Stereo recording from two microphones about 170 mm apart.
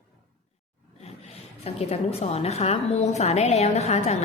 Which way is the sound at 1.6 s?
35° left (ahead or behind).